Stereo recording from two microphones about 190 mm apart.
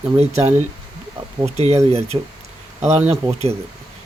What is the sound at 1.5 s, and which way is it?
Speech, 35° right (ahead or behind).